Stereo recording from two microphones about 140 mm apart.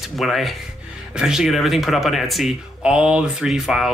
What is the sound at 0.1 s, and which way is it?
Speech, centre (ahead or behind).